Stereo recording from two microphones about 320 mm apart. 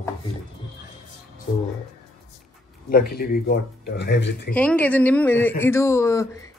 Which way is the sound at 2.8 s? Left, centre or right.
Left.